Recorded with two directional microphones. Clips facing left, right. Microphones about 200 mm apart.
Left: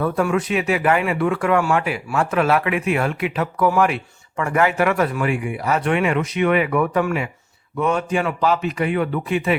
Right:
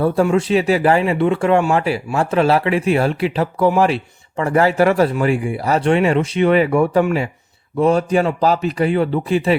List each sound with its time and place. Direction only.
0.0 s speech: 30° right (ahead or behind)